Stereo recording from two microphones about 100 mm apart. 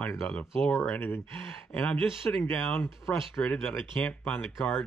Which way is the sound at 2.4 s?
20° left (ahead or behind).